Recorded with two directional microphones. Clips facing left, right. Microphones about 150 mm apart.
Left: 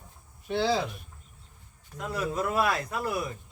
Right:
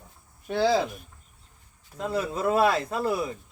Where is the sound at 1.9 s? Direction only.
30° right (ahead or behind).